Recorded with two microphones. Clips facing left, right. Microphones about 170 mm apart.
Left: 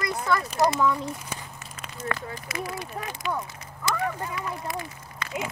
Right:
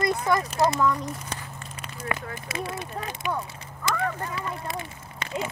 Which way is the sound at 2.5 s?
25° right (ahead or behind).